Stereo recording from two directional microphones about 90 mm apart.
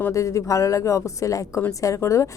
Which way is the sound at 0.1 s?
35° left (ahead or behind).